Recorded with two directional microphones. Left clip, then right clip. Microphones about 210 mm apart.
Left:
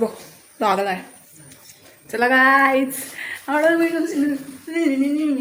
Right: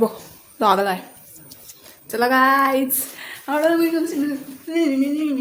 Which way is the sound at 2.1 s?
10° right (ahead or behind).